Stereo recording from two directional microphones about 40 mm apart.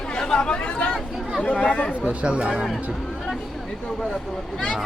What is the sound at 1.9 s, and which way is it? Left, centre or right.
Speech, right.